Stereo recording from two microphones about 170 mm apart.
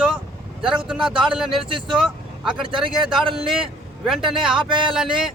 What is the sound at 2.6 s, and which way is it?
Speech, 30° right (ahead or behind).